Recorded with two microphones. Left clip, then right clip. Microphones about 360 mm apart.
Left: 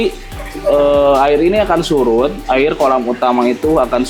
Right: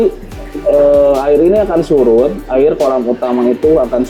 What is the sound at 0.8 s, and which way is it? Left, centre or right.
Speech, right.